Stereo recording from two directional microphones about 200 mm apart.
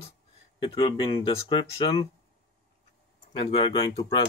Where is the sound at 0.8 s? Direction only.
25° left (ahead or behind).